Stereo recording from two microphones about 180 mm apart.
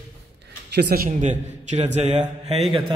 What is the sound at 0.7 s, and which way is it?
A man's voice, 60° right (ahead or behind).